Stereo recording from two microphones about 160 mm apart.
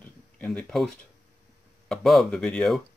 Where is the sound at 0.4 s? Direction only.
5° left (ahead or behind).